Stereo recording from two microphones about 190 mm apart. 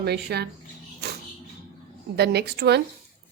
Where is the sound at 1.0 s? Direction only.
60° right (ahead or behind).